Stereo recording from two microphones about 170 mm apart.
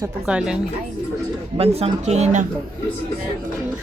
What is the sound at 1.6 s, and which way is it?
Speech, 35° right (ahead or behind).